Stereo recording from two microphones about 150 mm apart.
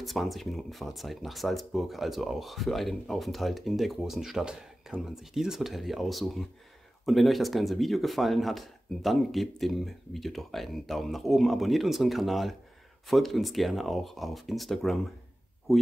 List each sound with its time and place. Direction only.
0.0 s speech: centre (ahead or behind)